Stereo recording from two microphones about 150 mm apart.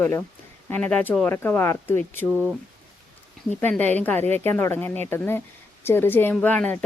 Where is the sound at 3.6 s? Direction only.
10° left (ahead or behind).